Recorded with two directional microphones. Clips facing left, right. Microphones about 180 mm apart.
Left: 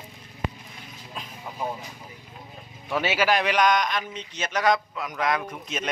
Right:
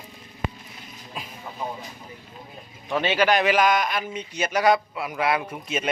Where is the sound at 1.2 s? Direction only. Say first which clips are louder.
Right 2 dB; 10° right (ahead or behind).